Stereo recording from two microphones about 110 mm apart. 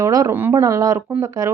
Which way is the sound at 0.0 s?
30° right (ahead or behind).